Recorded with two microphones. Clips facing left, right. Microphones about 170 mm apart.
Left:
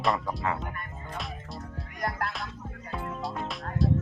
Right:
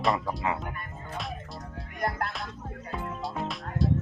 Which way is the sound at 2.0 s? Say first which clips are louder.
Right 1 dB; 25° right (ahead or behind).